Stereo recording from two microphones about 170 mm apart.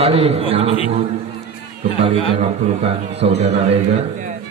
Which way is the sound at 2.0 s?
35° right (ahead or behind).